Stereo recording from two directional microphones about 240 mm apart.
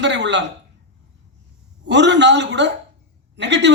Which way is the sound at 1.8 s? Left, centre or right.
Right.